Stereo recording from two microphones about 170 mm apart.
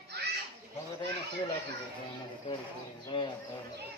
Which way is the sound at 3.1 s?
30° left (ahead or behind).